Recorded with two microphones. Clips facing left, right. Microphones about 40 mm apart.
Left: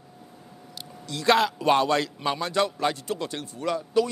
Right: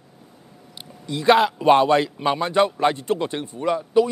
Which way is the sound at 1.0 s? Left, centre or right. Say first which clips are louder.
Right 5 dB; centre.